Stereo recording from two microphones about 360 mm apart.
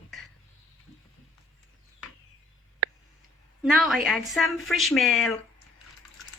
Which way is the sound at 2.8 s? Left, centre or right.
Right.